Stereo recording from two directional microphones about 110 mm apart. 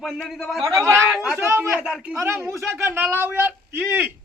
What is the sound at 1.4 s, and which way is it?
Speech, 20° right (ahead or behind).